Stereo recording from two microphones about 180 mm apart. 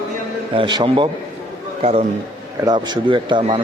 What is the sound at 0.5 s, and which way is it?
A man's voice, 25° right (ahead or behind).